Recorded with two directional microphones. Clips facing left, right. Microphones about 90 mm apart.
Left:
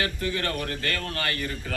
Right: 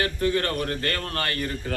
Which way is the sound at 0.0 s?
40° right (ahead or behind).